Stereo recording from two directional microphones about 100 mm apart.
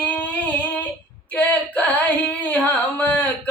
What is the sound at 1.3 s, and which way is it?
Female singing, 15° left (ahead or behind).